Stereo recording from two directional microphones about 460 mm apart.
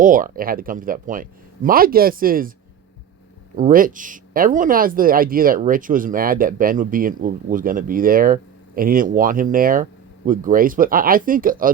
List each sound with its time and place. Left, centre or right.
0.0 s speech: centre
3.5 s speech: centre